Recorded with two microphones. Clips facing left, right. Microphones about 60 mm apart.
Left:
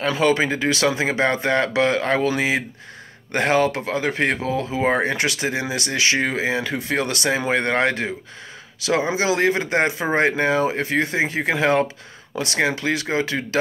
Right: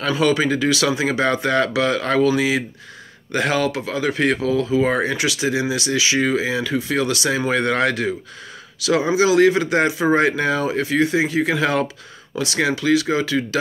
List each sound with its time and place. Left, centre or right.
0.2 s speech: left
7.3 s speech: left